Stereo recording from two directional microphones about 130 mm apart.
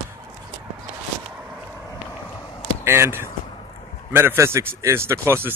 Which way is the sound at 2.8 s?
20° right (ahead or behind).